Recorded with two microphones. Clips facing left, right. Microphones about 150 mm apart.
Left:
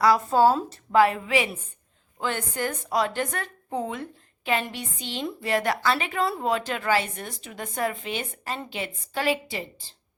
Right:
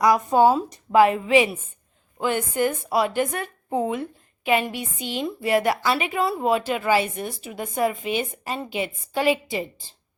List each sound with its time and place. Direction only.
0.0 s a woman's voice: 20° right (ahead or behind)